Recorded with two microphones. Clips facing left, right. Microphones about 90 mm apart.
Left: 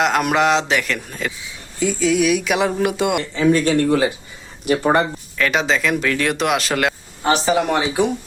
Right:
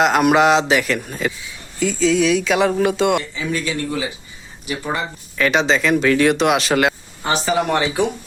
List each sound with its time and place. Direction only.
0.0 s speech: 5° right (ahead or behind)
1.8 s speech: 15° left (ahead or behind)
3.3 s speech: 55° left (ahead or behind)
5.4 s speech: centre (ahead or behind)
7.4 s speech: 15° left (ahead or behind)